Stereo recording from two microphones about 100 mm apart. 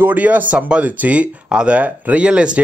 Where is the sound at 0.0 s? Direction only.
15° right (ahead or behind).